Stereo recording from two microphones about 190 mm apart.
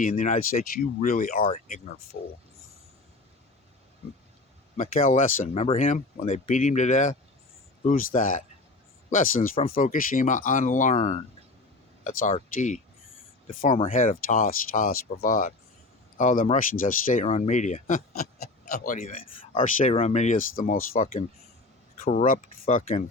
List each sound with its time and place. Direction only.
0.0 s speech: 40° left (ahead or behind)
2.1 s speech: 85° left
4.8 s speech: 45° left (ahead or behind)
13.9 s speech: 40° left (ahead or behind)
22.0 s speech: 35° left (ahead or behind)